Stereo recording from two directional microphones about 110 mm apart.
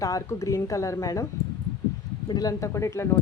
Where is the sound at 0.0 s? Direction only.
30° left (ahead or behind).